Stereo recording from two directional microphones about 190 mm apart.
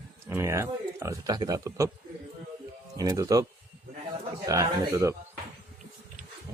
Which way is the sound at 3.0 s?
20° right (ahead or behind).